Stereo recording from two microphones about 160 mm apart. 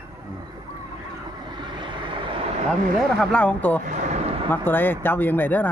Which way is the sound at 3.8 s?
45° right (ahead or behind).